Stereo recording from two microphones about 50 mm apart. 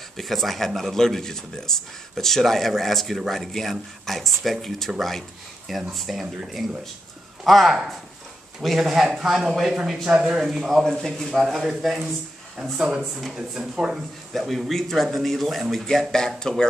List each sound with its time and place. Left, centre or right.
0.2 s speech: centre
10.8 s speech: centre
11.3 s speech: centre
13.0 s speech: centre
14.3 s speech: centre